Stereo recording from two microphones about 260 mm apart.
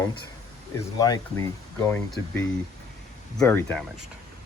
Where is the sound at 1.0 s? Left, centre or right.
Centre.